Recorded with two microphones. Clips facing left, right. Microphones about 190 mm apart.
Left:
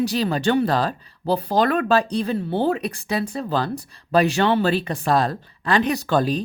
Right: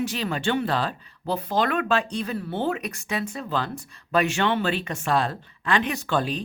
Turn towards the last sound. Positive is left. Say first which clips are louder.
# left 5 dB
turn(degrees=40)  # may be behind; listen again after turning